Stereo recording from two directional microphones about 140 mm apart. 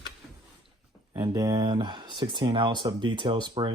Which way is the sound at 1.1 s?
25° right (ahead or behind).